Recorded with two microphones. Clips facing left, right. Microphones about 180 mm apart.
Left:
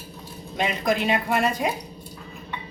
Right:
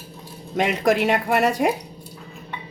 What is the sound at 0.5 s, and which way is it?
Speech, 75° right (ahead or behind).